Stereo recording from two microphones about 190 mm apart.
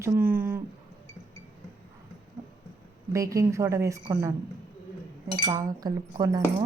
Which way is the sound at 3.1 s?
15° right (ahead or behind).